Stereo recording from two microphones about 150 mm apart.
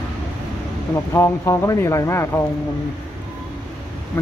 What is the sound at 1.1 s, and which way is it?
Speech, 15° left (ahead or behind).